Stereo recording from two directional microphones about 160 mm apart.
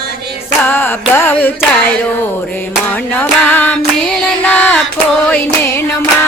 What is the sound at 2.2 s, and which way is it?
Music, 10° left (ahead or behind).